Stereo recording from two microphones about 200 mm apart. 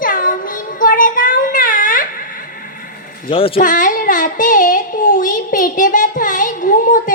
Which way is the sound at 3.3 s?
25° left (ahead or behind).